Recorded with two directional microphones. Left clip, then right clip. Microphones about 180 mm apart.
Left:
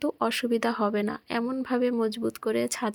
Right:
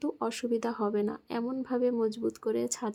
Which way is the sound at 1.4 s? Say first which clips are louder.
Left 4 dB; 25° left (ahead or behind).